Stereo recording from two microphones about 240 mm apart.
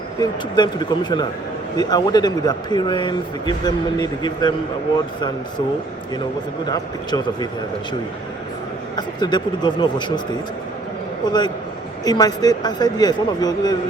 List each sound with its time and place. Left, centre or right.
0.2 s speech: centre
6.7 s speech: centre
9.0 s speech: centre
11.3 s speech: centre